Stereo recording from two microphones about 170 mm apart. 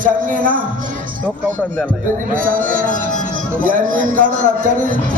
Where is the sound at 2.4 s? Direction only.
55° right (ahead or behind).